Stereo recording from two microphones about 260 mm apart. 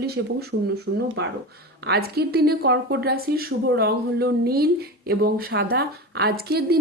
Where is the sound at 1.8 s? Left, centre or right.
Right.